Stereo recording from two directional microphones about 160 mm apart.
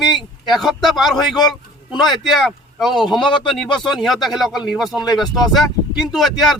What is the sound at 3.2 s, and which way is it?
Speech, 30° left (ahead or behind).